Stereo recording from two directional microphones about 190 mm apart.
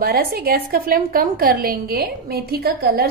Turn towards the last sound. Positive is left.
turn(degrees=-55)  # may be behind; listen again after turning